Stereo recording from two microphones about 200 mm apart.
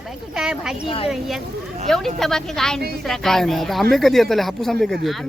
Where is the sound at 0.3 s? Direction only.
Centre (ahead or behind).